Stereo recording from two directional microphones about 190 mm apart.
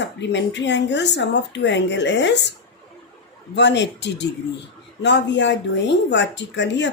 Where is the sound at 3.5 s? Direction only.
65° left (ahead or behind).